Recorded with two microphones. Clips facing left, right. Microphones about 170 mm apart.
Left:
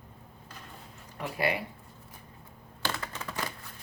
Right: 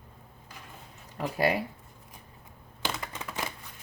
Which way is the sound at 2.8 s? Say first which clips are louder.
Even; 15° right (ahead or behind).